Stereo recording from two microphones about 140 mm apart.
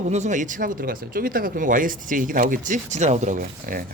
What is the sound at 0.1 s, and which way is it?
Speech, 55° right (ahead or behind).